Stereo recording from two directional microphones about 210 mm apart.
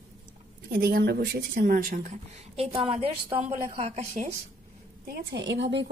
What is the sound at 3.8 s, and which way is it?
Speech, 30° right (ahead or behind).